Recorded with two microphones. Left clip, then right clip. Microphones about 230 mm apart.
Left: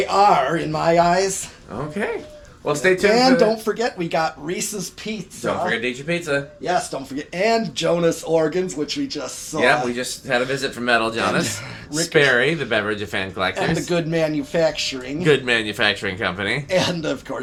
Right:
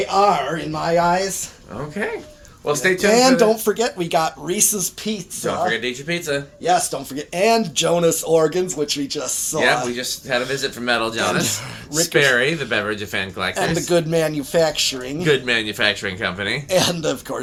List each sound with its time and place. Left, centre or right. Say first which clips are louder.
0.0 s speech: left 1 dB; left
2.6 s speech: left 1 dB; centre
3.1 s speech: right 3 dB; right
5.6 s speech: right 1 dB; centre
6.7 s speech: right 5 dB; right
9.9 s speech: even; centre
13.6 s speech: right 3 dB; right
15.2 s speech: left 1 dB; centre
16.6 s speech: right 4 dB; right